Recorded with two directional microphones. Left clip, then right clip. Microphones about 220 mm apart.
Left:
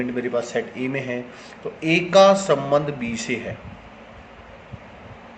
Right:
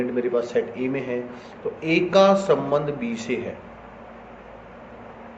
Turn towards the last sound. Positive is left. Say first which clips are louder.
# left 1 dB
turn(degrees=40)  # may be behind; listen again after turning